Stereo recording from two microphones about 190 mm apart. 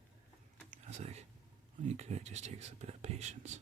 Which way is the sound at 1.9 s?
35° right (ahead or behind).